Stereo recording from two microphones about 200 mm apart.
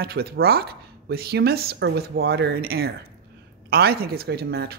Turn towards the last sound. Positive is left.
turn(degrees=-50)  # may be behind; listen again after turning